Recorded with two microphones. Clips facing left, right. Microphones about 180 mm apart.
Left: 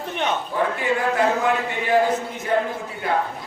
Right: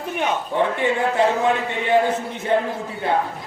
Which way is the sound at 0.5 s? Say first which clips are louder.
Right 4 dB; 25° right (ahead or behind).